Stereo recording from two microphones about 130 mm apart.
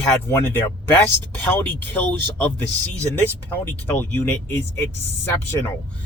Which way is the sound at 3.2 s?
15° left (ahead or behind).